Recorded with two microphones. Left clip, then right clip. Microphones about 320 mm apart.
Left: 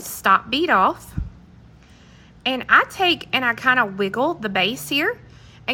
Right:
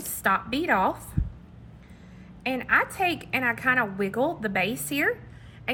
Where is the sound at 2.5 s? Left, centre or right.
Centre.